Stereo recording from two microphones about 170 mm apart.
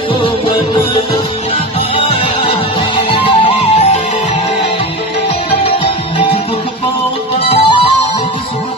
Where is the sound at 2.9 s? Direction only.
30° left (ahead or behind).